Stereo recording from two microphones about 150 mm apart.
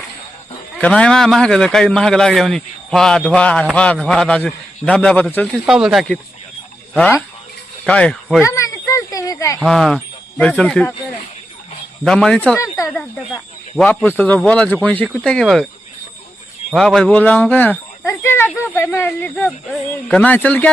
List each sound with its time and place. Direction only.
0.8 s a man's voice: 5° left (ahead or behind)
5.6 s a man's voice: 5° right (ahead or behind)
8.4 s a sound: 20° left (ahead or behind)
9.6 s speech: centre (ahead or behind)
12.0 s a man's voice: 5° left (ahead or behind)
12.5 s speech: 20° left (ahead or behind)
12.9 s a man's voice: 5° left (ahead or behind)
16.7 s speech: 5° left (ahead or behind)